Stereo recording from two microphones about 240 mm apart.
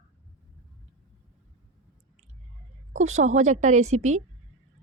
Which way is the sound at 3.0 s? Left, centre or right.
Right.